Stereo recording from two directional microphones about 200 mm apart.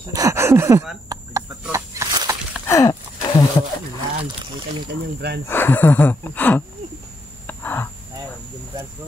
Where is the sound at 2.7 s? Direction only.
15° left (ahead or behind).